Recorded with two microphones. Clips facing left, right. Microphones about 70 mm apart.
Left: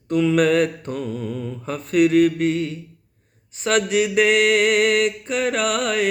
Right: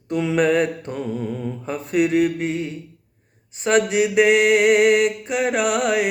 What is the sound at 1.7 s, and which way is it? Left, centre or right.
Mantra, centre.